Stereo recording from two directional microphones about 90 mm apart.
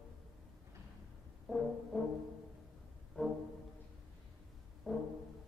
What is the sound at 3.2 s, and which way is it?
Music, 15° left (ahead or behind).